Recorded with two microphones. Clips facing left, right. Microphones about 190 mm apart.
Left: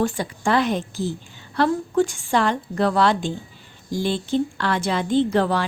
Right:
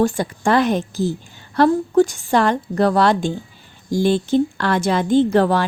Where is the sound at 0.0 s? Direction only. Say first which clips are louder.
Right 5 dB; 45° right (ahead or behind).